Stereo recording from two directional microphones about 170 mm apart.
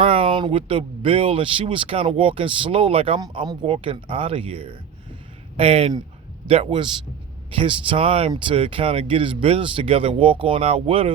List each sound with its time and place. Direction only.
0.0 s speech: 30° right (ahead or behind)